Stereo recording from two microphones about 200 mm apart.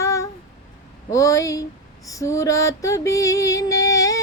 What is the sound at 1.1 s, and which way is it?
Music, 15° left (ahead or behind).